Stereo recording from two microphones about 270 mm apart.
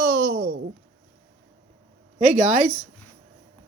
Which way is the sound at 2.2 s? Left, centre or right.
Right.